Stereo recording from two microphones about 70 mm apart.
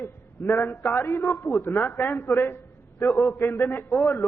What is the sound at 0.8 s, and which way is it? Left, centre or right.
A man's voice, left.